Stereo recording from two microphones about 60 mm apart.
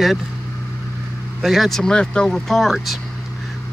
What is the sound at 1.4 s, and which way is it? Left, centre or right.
Speech, centre.